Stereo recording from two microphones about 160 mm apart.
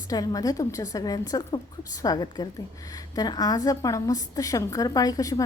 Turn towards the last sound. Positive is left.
turn(degrees=20)  # may be behind; listen again after turning